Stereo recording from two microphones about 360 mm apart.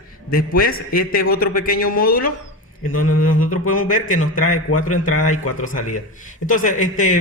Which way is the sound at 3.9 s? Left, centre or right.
Left.